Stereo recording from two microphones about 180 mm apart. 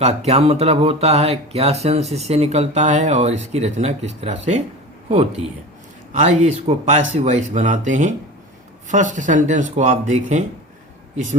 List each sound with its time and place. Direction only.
0.0 s speech: 35° right (ahead or behind)
6.1 s speech: 40° right (ahead or behind)